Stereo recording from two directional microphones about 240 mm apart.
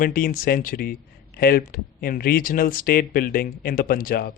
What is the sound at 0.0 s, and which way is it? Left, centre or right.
Speech, left.